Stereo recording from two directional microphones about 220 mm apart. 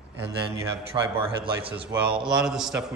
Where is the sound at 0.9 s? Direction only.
25° right (ahead or behind).